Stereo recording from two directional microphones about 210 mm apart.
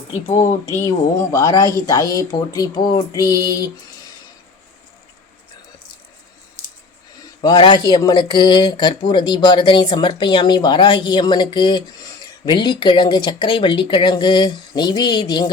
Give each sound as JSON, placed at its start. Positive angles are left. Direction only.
{"t": 0.8, "sound": "speech", "side_deg": 15}
{"t": 7.4, "sound": "speech", "side_deg": 20}